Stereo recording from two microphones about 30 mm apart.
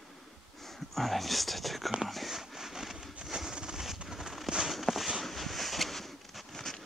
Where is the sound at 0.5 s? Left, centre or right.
Centre.